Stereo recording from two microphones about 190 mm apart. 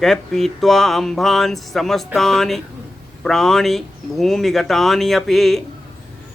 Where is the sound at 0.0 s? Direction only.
Centre (ahead or behind).